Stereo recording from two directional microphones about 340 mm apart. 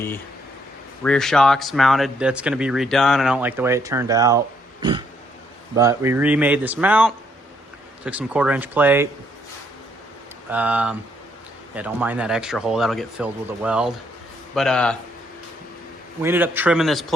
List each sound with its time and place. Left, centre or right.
1.0 s speech: centre
4.8 s a sound: centre
5.7 s speech: centre
10.5 s speech: centre
16.2 s speech: centre